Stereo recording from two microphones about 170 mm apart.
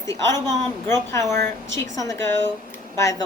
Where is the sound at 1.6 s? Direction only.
90° right.